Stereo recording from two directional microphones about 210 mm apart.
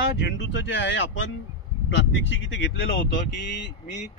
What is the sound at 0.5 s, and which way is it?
Speech, 60° left (ahead or behind).